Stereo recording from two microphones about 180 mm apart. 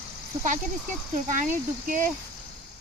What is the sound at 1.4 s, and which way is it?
Speech, 45° right (ahead or behind).